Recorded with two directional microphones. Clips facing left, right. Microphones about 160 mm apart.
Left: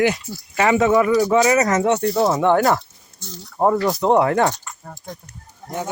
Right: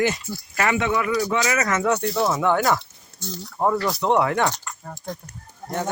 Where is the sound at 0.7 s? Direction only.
40° left (ahead or behind).